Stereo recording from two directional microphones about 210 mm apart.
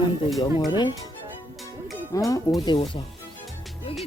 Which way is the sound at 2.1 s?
15° left (ahead or behind).